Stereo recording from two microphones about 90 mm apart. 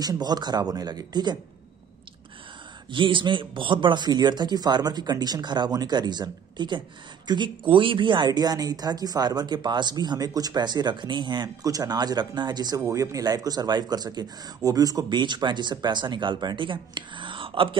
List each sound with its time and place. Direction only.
0.0 s a woman's voice: 45° right (ahead or behind)
2.9 s a woman's voice: 65° right (ahead or behind); by 15.1 s 45° right (ahead or behind)
15.1 s speech: 60° right (ahead or behind); by 17.7 s 75° right (ahead or behind)